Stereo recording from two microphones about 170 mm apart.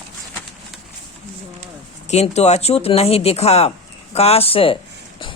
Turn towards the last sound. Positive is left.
turn(degrees=35)  # may be behind; listen again after turning